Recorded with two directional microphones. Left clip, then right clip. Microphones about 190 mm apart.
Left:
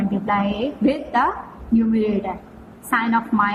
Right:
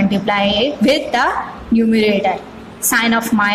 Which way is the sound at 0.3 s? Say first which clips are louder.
Right 6 dB; 40° right (ahead or behind).